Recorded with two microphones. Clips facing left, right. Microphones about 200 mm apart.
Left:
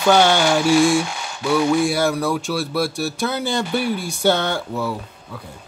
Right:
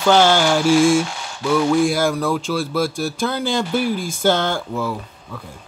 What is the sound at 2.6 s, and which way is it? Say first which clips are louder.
Speech: right 1 dB; 70° left (ahead or behind).